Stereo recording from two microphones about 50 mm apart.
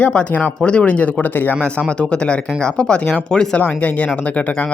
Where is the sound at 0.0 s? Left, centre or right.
Left.